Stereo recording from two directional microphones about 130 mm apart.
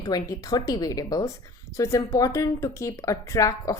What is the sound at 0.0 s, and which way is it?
A woman's voice, 30° left (ahead or behind).